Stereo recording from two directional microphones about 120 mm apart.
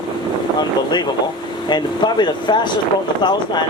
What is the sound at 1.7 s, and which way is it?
Speech, 40° left (ahead or behind).